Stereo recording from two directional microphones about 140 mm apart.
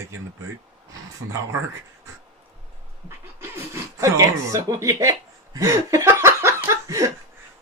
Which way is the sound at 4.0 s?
25° right (ahead or behind).